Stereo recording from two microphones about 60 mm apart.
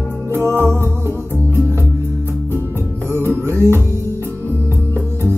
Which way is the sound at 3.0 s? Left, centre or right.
Right.